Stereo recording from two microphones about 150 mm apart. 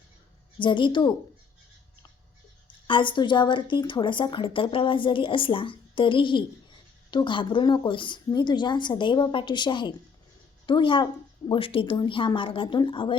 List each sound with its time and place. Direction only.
0.6 s a woman's voice: 35° left (ahead or behind)
2.8 s a woman's voice: 35° left (ahead or behind)